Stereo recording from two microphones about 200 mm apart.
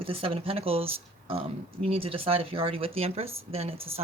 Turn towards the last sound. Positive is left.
turn(degrees=-30)  # may be behind; listen again after turning